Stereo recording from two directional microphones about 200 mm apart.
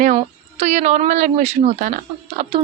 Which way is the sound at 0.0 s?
35° right (ahead or behind).